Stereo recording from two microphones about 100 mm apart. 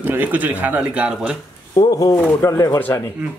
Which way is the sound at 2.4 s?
30° left (ahead or behind).